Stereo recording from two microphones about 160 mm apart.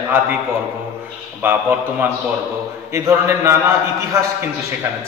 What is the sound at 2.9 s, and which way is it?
Speech, 15° right (ahead or behind).